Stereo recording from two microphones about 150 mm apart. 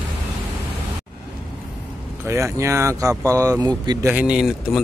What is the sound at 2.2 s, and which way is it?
Speech, 20° right (ahead or behind).